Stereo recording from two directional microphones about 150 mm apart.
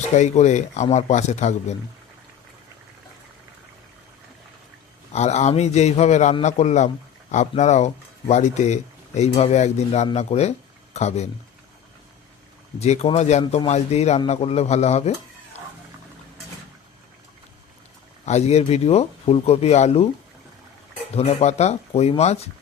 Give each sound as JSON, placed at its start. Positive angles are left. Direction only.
{"t": 0.2, "sound": "speech", "side_deg": 50}
{"t": 5.1, "sound": "speech", "side_deg": 50}
{"t": 12.8, "sound": "speech", "side_deg": 45}
{"t": 18.3, "sound": "speech", "side_deg": 45}
{"t": 21.2, "sound": "speech", "side_deg": 45}